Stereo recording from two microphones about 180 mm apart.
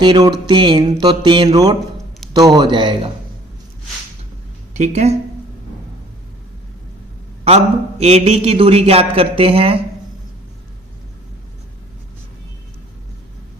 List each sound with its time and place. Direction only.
0.0 s mantra: 25° right (ahead or behind)
4.7 s a woman's voice: 40° right (ahead or behind)
7.4 s a man's voice: 35° right (ahead or behind)